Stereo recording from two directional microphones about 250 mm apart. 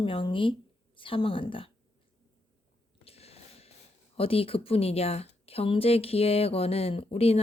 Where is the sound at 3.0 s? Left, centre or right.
Left.